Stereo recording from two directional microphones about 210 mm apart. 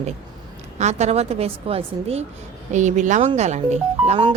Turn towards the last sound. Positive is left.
turn(degrees=-25)  # may be behind; listen again after turning